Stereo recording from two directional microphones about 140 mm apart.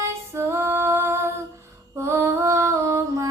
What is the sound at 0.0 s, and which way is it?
Female singing, 20° right (ahead or behind).